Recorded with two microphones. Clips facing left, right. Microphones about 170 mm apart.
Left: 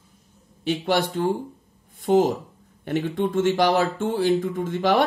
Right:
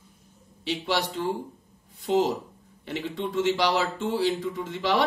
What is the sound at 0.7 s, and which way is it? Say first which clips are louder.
Speech: left 5 dB; 50° left (ahead or behind).